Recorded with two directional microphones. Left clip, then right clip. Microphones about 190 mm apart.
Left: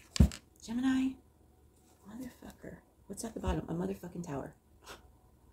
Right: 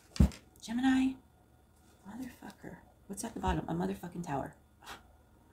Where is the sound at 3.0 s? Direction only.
20° right (ahead or behind).